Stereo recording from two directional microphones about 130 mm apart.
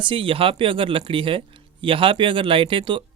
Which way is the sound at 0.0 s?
40° right (ahead or behind).